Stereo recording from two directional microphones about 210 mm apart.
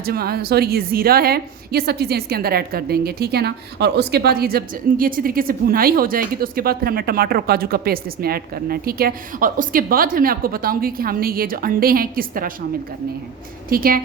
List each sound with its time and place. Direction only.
0.0 s a woman's voice: 45° right (ahead or behind)
13.7 s a woman's voice: 45° right (ahead or behind)